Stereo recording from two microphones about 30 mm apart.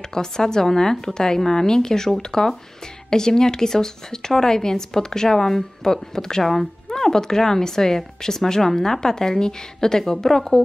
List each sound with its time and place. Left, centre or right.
0.1 s speech: left